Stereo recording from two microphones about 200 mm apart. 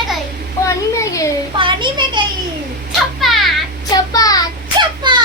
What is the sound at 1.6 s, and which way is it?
Speech, 25° right (ahead or behind).